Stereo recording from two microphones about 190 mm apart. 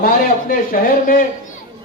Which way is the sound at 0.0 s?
45° left (ahead or behind).